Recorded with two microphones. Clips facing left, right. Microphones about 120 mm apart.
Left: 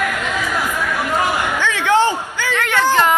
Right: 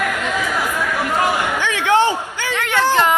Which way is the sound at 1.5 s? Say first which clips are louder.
Left 2 dB; 20° right (ahead or behind).